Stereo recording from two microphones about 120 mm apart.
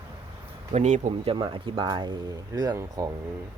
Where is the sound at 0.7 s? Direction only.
75° right (ahead or behind).